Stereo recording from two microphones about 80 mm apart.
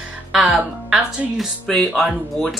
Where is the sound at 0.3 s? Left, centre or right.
Centre.